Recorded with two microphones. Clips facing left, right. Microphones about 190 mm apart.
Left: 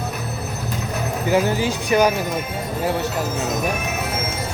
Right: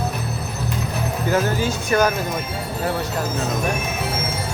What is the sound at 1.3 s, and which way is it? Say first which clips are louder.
Speech: left 2 dB; 15° left (ahead or behind).